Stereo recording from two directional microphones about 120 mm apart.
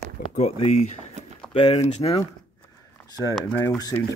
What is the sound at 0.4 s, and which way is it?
Speech, 60° left (ahead or behind).